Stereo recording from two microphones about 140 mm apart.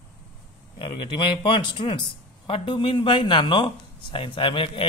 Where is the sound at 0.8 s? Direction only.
35° left (ahead or behind).